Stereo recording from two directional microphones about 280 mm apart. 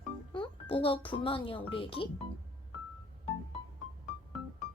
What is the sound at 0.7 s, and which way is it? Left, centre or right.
Speech, centre.